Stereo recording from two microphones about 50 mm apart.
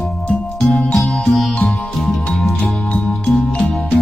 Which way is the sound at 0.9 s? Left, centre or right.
Centre.